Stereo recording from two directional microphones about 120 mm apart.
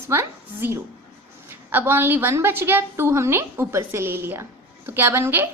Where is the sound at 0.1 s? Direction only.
20° right (ahead or behind).